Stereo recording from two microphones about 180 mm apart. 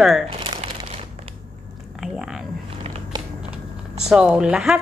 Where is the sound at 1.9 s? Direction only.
Centre (ahead or behind).